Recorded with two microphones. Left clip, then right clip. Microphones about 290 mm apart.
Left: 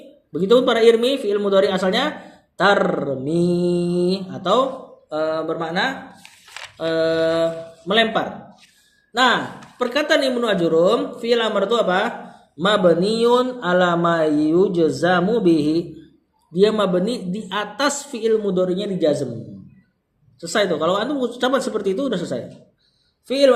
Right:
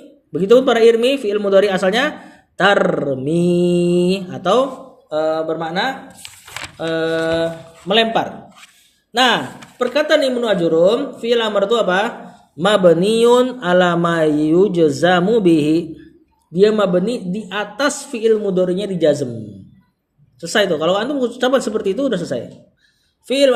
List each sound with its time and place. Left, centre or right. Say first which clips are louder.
0.3 s speech: right 4 dB; right
5.0 s speech: right 4 dB; centre
9.7 s speech: right 3 dB; centre
20.4 s speech: right 3 dB; right